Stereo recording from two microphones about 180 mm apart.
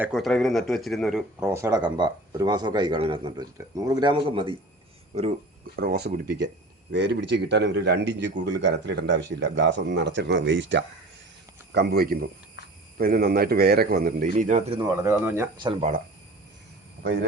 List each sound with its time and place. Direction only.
0.0 s speech: centre (ahead or behind)
1.4 s speech: 15° right (ahead or behind); by 3.4 s 30° right (ahead or behind)
3.6 s speech: 15° right (ahead or behind)
4.1 s speech: 30° right (ahead or behind)
5.7 s a man's voice: 60° right (ahead or behind)
6.9 s speech: 75° right (ahead or behind); by 10.8 s 90° right
11.7 s a man's voice: 65° right (ahead or behind)
12.6 s cricket: 70° left (ahead or behind)
13.0 s a man's voice: 55° right (ahead or behind)
14.8 s speech: 15° right (ahead or behind)
15.5 s speech: 30° right (ahead or behind)
17.0 s speech: 70° right (ahead or behind)